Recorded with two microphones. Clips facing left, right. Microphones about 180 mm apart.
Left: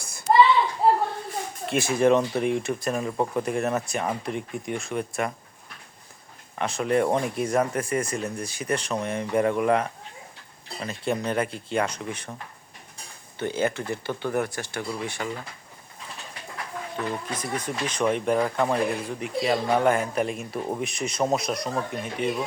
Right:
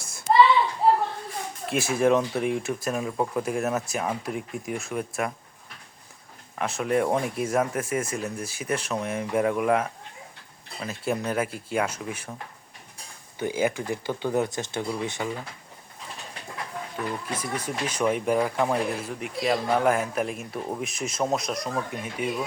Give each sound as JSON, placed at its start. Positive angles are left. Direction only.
{"t": 0.0, "sound": "a sound", "side_deg": 0}
{"t": 1.6, "sound": "speech", "side_deg": 0}
{"t": 6.6, "sound": "speech", "side_deg": 0}
{"t": 13.4, "sound": "speech", "side_deg": -10}
{"t": 17.3, "sound": "speech", "side_deg": -10}